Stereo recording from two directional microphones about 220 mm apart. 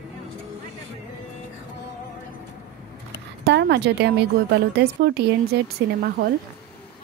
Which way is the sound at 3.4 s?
50° right (ahead or behind).